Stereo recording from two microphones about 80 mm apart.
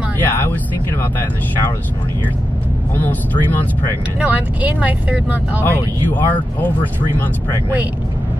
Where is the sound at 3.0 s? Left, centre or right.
Left.